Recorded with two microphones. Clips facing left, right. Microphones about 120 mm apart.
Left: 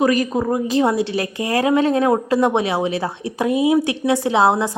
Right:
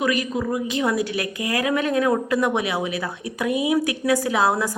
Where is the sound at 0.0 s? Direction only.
40° left (ahead or behind).